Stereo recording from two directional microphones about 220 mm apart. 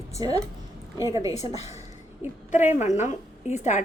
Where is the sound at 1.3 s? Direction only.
30° left (ahead or behind).